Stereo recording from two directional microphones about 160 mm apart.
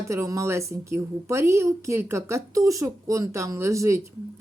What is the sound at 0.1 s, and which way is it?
A woman's voice, 20° right (ahead or behind).